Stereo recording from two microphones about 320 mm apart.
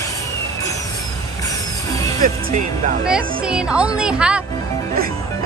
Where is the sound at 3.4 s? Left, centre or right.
Centre.